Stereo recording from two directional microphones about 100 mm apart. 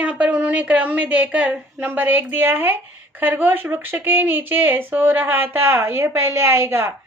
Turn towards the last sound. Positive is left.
turn(degrees=-25)  # may be behind; listen again after turning